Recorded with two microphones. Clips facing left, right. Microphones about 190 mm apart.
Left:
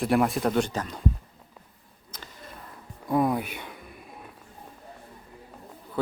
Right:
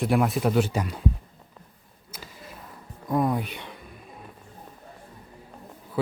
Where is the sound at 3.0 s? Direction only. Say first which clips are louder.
Even; 5° left (ahead or behind).